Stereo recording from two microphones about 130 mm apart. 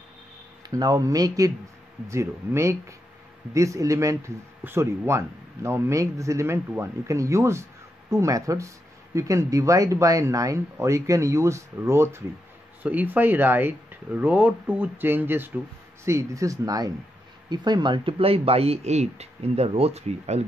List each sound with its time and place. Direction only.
0.7 s a man's voice: 30° right (ahead or behind); by 20.4 s 55° right (ahead or behind)